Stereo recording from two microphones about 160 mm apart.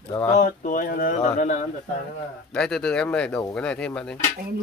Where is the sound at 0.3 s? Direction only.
55° left (ahead or behind).